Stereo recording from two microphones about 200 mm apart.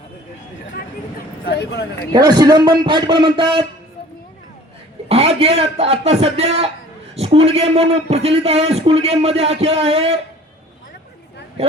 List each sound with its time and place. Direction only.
1.5 s speech: 55° left (ahead or behind)
2.1 s a man's voice: 20° right (ahead or behind)
5.0 s a man's voice: 30° right (ahead or behind)